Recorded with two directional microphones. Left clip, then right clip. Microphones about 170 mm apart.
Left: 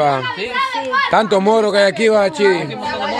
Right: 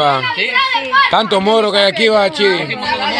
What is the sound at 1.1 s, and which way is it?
Speech, 25° left (ahead or behind).